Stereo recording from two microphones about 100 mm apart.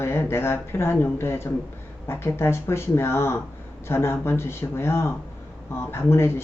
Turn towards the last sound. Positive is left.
turn(degrees=25)  # may be behind; listen again after turning